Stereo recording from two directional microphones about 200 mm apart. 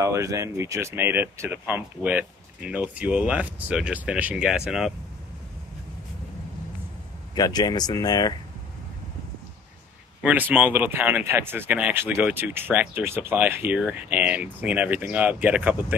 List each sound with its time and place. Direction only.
0.0 s speech: 15° right (ahead or behind)
7.3 s speech: 20° left (ahead or behind)
10.2 s speech: 10° right (ahead or behind)